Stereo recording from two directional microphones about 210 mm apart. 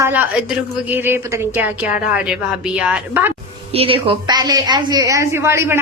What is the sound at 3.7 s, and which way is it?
A woman's voice, 25° right (ahead or behind).